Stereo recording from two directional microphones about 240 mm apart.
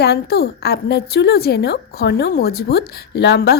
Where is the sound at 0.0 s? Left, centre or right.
Left.